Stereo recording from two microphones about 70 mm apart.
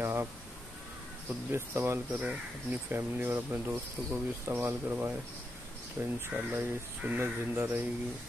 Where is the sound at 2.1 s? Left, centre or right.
Right.